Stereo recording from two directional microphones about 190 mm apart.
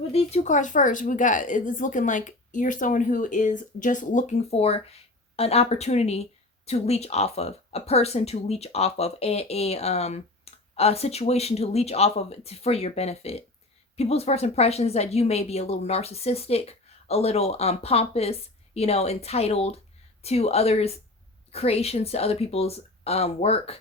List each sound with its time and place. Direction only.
0.1 s speech: 35° left (ahead or behind)